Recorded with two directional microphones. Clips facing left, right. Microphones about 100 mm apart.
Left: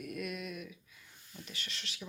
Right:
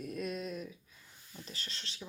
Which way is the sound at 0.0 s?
30° right (ahead or behind).